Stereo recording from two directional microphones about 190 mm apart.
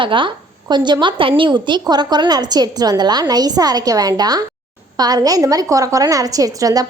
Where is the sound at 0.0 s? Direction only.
25° right (ahead or behind).